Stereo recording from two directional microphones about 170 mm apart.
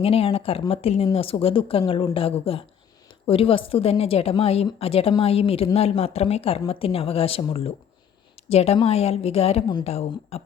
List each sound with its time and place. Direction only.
0.0 s speech: 35° left (ahead or behind)